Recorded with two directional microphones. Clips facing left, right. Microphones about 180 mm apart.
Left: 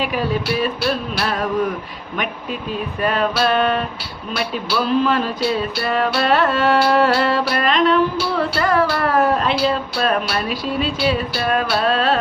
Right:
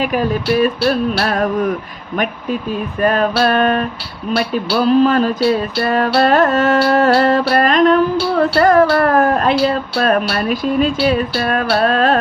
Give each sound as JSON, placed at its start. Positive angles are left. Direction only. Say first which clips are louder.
{"t": 0.0, "sound": "music", "louder": "right 4 dB", "side_deg": -45}
{"t": 3.0, "sound": "music", "louder": "right 4 dB", "side_deg": -45}